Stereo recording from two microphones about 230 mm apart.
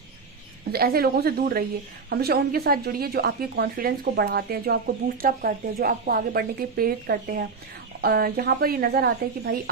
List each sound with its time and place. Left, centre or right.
0.7 s a woman's voice: right